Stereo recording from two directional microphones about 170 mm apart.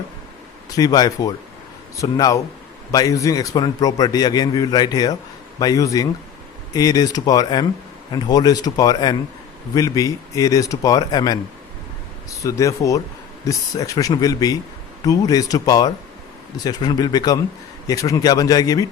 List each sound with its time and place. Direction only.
0.8 s a man's voice: 20° left (ahead or behind)